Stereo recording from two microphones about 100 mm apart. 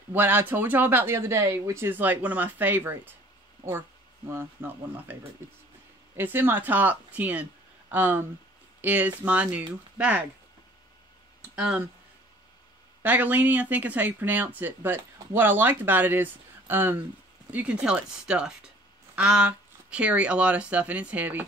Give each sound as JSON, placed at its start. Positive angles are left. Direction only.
{"t": 0.1, "sound": "speech", "side_deg": -20}
{"t": 4.3, "sound": "speech", "side_deg": -25}
{"t": 6.1, "sound": "speech", "side_deg": -20}
{"t": 11.5, "sound": "speech", "side_deg": -10}
{"t": 13.0, "sound": "speech", "side_deg": -15}